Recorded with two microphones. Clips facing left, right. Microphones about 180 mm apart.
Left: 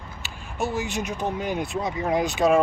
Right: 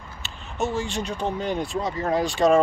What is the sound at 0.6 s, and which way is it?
Speech, 10° left (ahead or behind).